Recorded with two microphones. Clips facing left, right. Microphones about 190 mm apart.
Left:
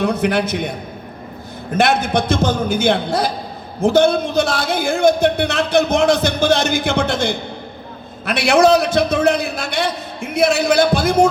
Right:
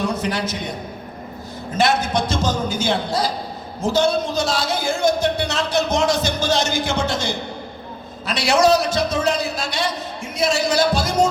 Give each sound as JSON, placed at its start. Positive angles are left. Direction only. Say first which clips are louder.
{"t": 0.0, "sound": "a man's voice", "louder": "left 5 dB", "side_deg": 60}
{"t": 1.7, "sound": "a man's voice", "louder": "left 3 dB", "side_deg": 60}